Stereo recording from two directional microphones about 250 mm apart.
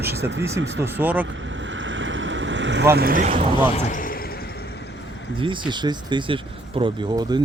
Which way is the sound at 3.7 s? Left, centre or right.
Left.